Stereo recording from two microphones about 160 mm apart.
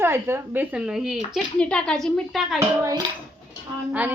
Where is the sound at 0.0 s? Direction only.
15° right (ahead or behind); by 2.6 s centre (ahead or behind).